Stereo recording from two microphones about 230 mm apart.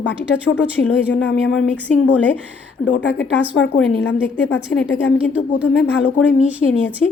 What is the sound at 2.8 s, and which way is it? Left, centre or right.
Speech, left.